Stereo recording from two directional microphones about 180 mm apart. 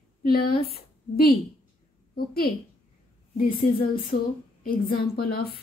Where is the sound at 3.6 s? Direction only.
50° left (ahead or behind).